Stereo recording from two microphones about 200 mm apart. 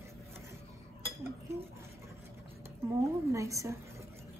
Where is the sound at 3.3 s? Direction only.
15° right (ahead or behind).